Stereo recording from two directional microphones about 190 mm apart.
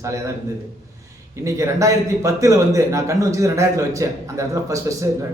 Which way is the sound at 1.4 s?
15° right (ahead or behind).